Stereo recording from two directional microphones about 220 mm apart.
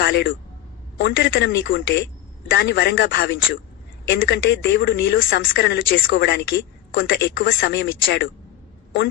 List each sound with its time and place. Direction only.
0.0 s speech: 45° left (ahead or behind)